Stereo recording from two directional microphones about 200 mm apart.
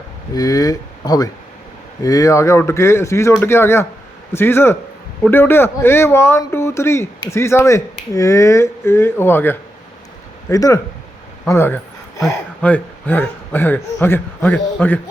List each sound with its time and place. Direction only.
0.3 s a man's voice: 20° left (ahead or behind)
11.4 s a sound: 10° left (ahead or behind)
12.2 s a man's voice: 5° left (ahead or behind)